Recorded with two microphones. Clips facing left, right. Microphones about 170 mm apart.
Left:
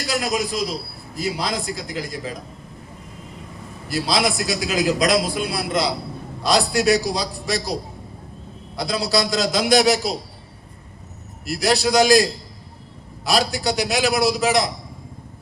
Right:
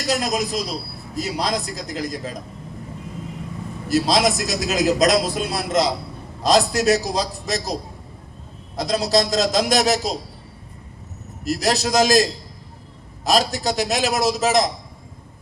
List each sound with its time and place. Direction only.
0.1 s a man's voice: 40° right (ahead or behind)
3.8 s a man's voice: 40° right (ahead or behind)
11.4 s a man's voice: 40° right (ahead or behind)